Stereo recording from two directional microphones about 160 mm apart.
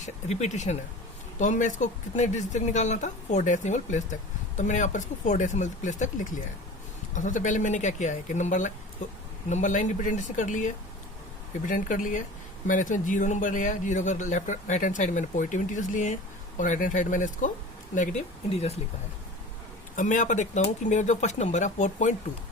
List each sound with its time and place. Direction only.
0.0 s speech: 45° left (ahead or behind)
20.0 s speech: 50° left (ahead or behind)